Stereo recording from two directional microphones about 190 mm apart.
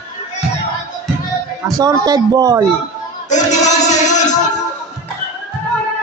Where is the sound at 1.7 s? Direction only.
20° right (ahead or behind).